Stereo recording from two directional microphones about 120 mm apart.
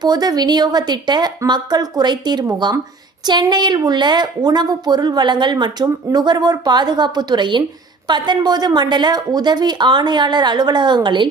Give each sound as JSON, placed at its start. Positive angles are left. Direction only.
{"t": 0.0, "sound": "a woman's voice", "side_deg": -35}